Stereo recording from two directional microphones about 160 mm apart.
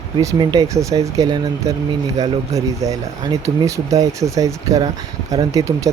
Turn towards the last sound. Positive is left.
turn(degrees=-20)  # may be behind; listen again after turning